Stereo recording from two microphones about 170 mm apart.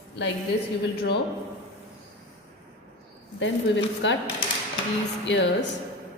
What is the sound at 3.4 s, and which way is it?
Speech, 90° left.